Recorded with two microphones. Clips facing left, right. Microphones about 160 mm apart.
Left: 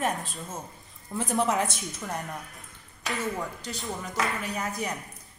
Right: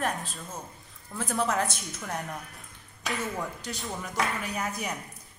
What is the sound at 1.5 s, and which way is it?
Speech, centre (ahead or behind).